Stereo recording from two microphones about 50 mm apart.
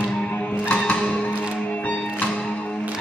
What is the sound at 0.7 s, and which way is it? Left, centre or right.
Music, left.